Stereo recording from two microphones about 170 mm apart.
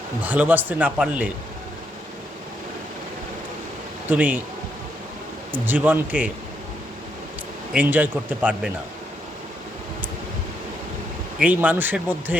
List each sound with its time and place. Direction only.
0.2 s speech: 10° right (ahead or behind)
4.1 s speech: 10° right (ahead or behind)
5.5 s speech: 10° right (ahead or behind)
7.7 s speech: 10° right (ahead or behind)
11.3 s speech: 10° right (ahead or behind)